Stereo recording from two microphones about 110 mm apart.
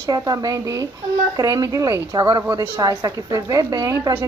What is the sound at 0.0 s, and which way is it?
A woman's voice, 35° right (ahead or behind).